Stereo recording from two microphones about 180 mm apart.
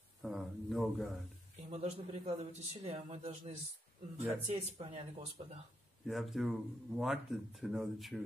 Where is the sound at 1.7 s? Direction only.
40° right (ahead or behind).